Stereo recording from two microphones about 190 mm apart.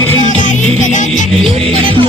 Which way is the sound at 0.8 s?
40° left (ahead or behind).